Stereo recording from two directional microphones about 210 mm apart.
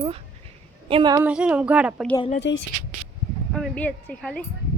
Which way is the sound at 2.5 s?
60° left (ahead or behind).